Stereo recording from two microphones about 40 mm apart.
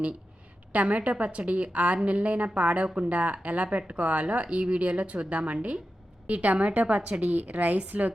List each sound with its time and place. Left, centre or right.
0.7 s a woman's voice: right